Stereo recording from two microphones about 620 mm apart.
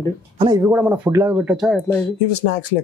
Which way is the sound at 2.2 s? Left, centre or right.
Left.